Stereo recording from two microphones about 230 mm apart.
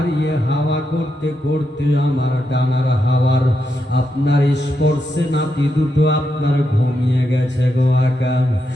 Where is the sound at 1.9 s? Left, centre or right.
Left.